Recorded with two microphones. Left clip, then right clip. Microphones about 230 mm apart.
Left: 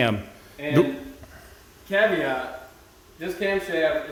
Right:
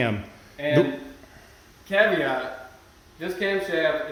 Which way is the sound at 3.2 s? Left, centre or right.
Centre.